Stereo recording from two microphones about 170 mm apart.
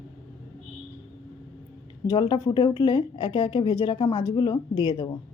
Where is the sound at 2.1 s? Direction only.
25° left (ahead or behind).